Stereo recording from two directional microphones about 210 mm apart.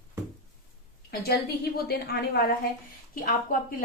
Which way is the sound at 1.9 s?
50° left (ahead or behind).